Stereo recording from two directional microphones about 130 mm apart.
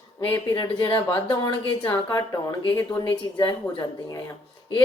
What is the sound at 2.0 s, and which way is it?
A woman's voice, 25° left (ahead or behind).